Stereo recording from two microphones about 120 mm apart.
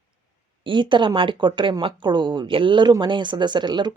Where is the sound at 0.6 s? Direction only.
40° right (ahead or behind).